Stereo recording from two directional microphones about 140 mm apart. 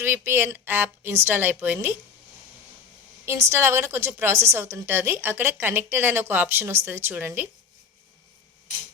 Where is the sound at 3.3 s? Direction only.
20° right (ahead or behind).